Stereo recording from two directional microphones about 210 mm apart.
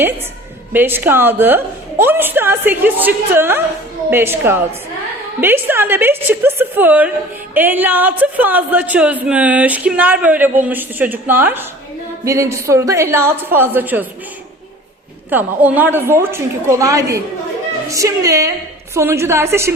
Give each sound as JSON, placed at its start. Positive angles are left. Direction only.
{"t": 0.7, "sound": "a woman's voice", "side_deg": -10}
{"t": 15.3, "sound": "a woman's voice", "side_deg": -10}